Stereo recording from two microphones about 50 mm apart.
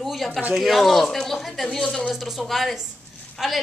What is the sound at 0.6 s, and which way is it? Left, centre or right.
Speech, centre.